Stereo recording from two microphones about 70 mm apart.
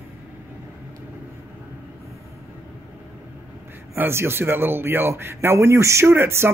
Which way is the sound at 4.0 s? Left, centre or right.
Right.